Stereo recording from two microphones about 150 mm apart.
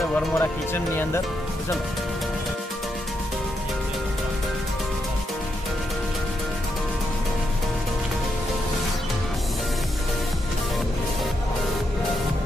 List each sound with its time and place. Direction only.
0.4 s speech: 15° left (ahead or behind)